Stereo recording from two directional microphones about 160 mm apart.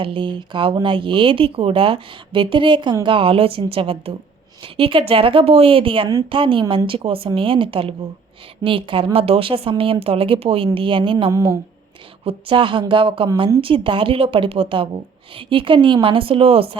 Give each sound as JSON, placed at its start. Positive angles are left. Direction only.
{"t": 0.0, "sound": "speech", "side_deg": -30}
{"t": 11.3, "sound": "speech", "side_deg": -20}
{"t": 12.2, "sound": "speech", "side_deg": -35}